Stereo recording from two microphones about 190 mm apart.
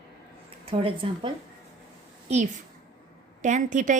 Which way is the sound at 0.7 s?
30° right (ahead or behind).